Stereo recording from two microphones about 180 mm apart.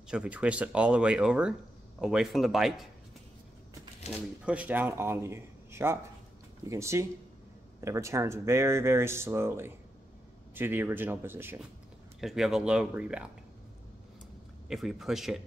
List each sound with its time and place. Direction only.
0.1 s speech: 5° right (ahead or behind)
4.5 s a man's voice: 10° right (ahead or behind)
12.2 s speech: centre (ahead or behind)
14.7 s speech: centre (ahead or behind)